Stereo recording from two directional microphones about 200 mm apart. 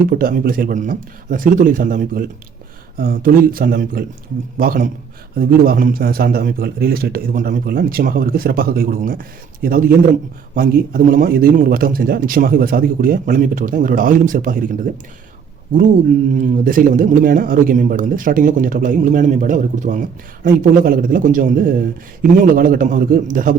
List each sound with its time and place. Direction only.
0.1 s a man's voice: 45° right (ahead or behind)
16.4 s a man's voice: 45° right (ahead or behind)